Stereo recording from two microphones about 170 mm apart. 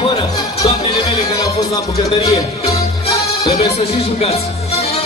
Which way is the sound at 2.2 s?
35° left (ahead or behind).